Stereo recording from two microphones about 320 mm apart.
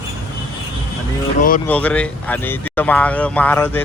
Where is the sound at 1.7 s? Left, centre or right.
Centre.